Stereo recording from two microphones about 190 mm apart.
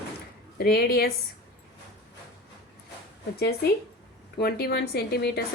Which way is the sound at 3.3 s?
55° left (ahead or behind).